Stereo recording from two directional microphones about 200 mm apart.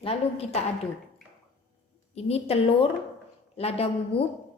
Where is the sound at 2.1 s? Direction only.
30° left (ahead or behind).